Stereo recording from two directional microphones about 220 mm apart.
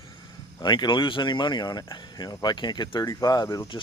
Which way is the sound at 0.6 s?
20° left (ahead or behind).